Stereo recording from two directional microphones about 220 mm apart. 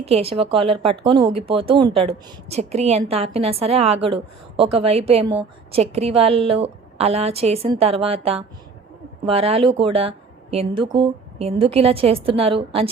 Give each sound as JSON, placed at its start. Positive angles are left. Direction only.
{"t": 0.0, "sound": "a woman's voice", "side_deg": -25}